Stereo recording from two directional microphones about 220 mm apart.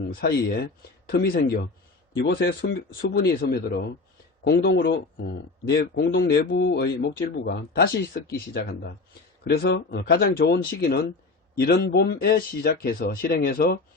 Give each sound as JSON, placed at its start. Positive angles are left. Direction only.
{"t": 0.1, "sound": "speech", "side_deg": 40}
{"t": 9.4, "sound": "speech", "side_deg": 45}